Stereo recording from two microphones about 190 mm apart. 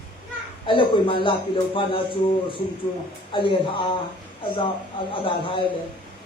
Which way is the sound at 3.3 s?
25° left (ahead or behind).